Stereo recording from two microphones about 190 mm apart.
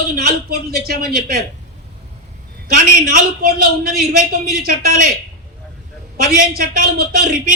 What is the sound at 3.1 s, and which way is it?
A man's voice, 55° right (ahead or behind).